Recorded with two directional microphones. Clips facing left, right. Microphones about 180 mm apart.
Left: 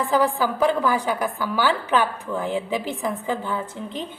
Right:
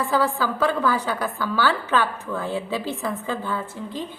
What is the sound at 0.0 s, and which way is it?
A woman's voice, 15° left (ahead or behind).